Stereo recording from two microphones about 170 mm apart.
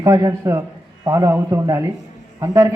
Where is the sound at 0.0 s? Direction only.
20° right (ahead or behind).